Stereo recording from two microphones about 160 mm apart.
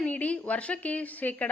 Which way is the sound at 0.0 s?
10° left (ahead or behind).